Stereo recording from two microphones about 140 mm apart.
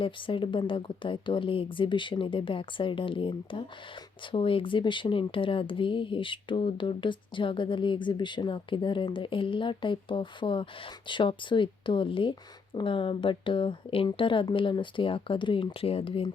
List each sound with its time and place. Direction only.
0.0 s speech: 35° left (ahead or behind)